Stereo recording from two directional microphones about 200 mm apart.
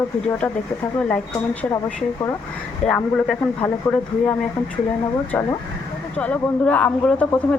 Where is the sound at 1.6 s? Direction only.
10° left (ahead or behind).